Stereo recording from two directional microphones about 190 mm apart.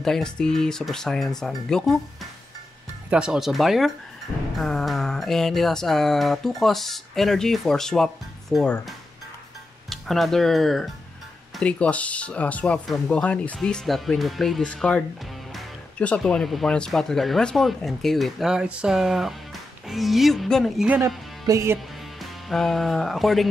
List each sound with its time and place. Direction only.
0.0 s speech: 5° left (ahead or behind)
3.1 s speech: 5° right (ahead or behind)
9.8 s speech: centre (ahead or behind)
21.5 s speech: 15° right (ahead or behind)
21.7 s speech: centre (ahead or behind)